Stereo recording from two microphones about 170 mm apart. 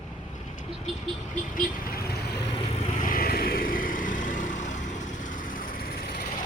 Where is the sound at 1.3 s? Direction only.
55° left (ahead or behind); by 2.4 s 70° left (ahead or behind).